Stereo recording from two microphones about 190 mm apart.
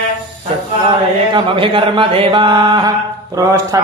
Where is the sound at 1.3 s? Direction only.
25° right (ahead or behind).